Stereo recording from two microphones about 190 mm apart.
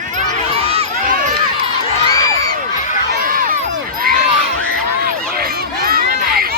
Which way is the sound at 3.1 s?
50° right (ahead or behind).